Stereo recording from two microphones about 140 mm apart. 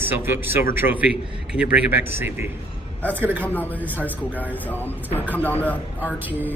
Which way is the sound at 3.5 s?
10° left (ahead or behind).